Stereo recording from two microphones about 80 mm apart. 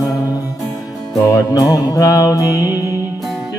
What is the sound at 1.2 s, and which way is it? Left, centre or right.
Music, left.